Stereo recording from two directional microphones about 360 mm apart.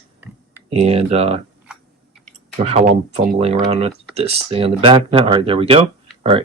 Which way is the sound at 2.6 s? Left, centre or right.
Centre.